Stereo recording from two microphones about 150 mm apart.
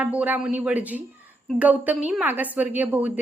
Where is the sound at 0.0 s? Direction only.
10° right (ahead or behind).